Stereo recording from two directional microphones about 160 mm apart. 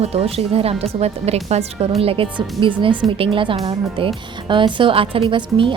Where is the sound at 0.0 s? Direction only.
40° right (ahead or behind).